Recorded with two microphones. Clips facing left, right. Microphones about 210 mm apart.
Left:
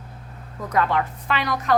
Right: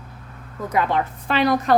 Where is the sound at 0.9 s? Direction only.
30° right (ahead or behind).